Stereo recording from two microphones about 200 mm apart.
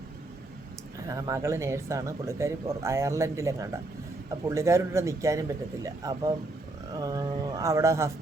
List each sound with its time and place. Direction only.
1.0 s speech: 15° right (ahead or behind)